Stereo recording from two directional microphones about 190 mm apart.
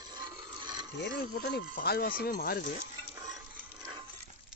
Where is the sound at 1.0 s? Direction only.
50° left (ahead or behind).